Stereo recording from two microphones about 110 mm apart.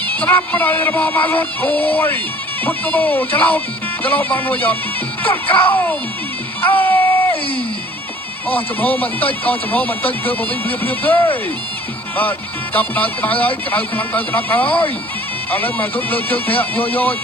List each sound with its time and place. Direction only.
0.0 s speech: 15° left (ahead or behind)
6.6 s a sound: 15° left (ahead or behind)
8.4 s speech: 15° left (ahead or behind)
12.7 s speech: 15° left (ahead or behind)